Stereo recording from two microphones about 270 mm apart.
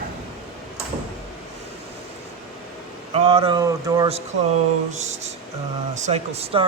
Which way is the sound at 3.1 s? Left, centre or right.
Right.